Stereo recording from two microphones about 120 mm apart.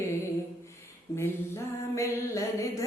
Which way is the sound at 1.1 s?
20° left (ahead or behind).